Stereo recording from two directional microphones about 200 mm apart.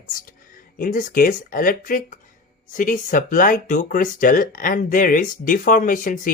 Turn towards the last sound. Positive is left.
turn(degrees=40)  # may be behind; listen again after turning